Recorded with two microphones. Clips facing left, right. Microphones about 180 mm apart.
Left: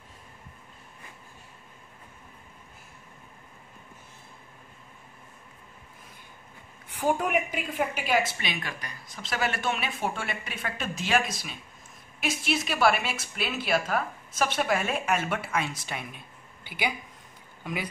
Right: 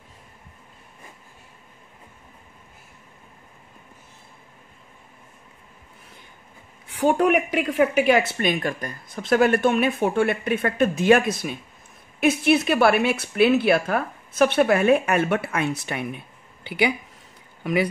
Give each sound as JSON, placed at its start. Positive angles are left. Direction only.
{"t": 6.9, "sound": "speech", "side_deg": -70}